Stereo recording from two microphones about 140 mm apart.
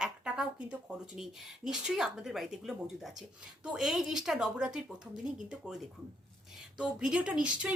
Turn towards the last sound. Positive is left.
turn(degrees=-5)  # may be behind; listen again after turning